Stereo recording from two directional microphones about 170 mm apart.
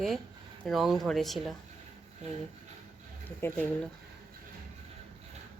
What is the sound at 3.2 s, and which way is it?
Speech, 10° left (ahead or behind).